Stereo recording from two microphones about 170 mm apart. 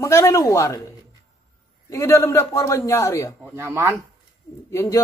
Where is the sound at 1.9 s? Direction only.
15° left (ahead or behind).